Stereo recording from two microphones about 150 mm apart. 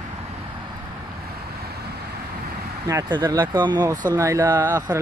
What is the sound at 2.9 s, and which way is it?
Speech, 25° right (ahead or behind).